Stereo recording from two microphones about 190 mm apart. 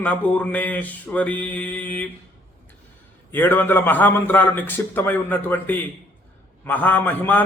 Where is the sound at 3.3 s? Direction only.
10° left (ahead or behind).